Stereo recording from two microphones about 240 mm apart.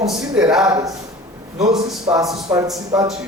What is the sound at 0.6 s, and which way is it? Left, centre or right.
Speech, centre.